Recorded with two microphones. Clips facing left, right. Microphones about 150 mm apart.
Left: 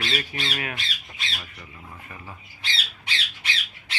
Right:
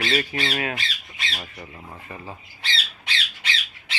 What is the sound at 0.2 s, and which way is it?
Speech, 70° right (ahead or behind).